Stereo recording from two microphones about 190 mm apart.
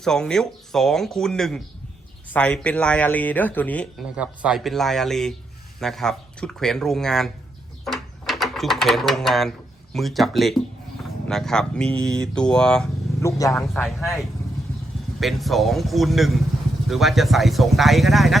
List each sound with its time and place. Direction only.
0.0 s speech: 5° left (ahead or behind)
4.1 s speech: 5° right (ahead or behind)
13.2 s speech: 15° left (ahead or behind)
13.6 s speech: centre (ahead or behind)
15.2 s speech: centre (ahead or behind)